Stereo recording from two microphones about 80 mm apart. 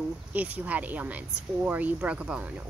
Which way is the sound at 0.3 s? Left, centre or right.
Centre.